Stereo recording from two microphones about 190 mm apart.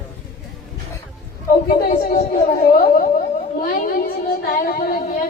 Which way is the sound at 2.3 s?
50° left (ahead or behind).